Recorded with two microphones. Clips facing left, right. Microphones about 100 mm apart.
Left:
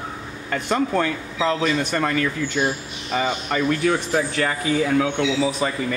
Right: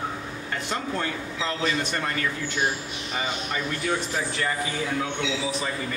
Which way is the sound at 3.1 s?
70° left (ahead or behind).